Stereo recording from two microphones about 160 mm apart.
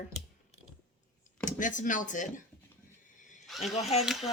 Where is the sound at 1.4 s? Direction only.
55° left (ahead or behind).